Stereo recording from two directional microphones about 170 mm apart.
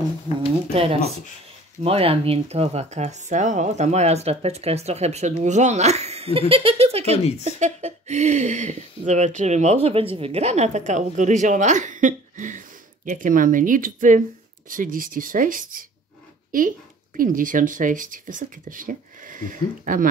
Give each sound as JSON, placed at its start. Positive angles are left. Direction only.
{"t": 0.7, "sound": "speech", "side_deg": -35}
{"t": 17.2, "sound": "speech", "side_deg": -55}